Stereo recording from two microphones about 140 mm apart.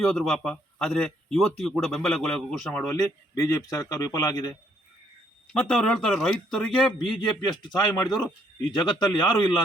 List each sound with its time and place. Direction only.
0.0 s a man's voice: 5° left (ahead or behind)
2.9 s speech: 20° left (ahead or behind)
5.5 s a man's voice: 5° left (ahead or behind)
7.8 s speech: 30° left (ahead or behind)